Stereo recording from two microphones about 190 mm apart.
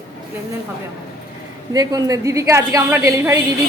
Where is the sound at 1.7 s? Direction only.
20° right (ahead or behind).